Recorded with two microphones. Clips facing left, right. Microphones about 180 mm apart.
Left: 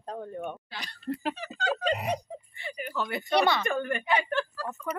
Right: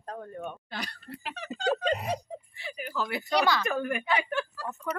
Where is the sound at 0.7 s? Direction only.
55° right (ahead or behind).